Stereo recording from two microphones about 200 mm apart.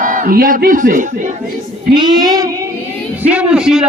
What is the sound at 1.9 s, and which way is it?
Child singing, 20° right (ahead or behind).